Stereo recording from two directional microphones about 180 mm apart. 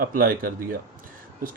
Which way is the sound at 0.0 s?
50° right (ahead or behind).